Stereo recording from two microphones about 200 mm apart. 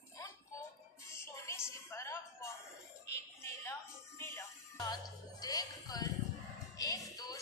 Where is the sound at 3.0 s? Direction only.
15° left (ahead or behind).